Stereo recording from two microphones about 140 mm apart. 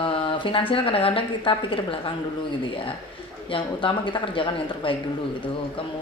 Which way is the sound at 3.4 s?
35° left (ahead or behind).